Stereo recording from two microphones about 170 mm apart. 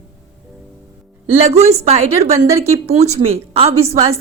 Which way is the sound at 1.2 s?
35° right (ahead or behind).